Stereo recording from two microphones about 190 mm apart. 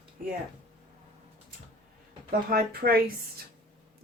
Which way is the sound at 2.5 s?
55° right (ahead or behind).